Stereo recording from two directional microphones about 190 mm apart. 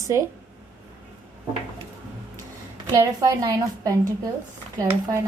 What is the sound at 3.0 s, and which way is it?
A woman's voice, 20° right (ahead or behind).